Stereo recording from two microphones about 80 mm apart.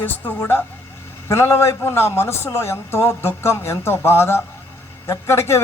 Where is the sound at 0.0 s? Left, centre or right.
Left.